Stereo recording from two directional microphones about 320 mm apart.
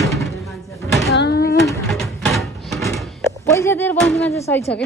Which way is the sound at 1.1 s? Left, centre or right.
Left.